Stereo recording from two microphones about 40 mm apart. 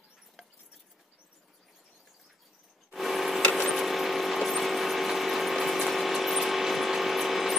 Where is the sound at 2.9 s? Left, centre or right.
Centre.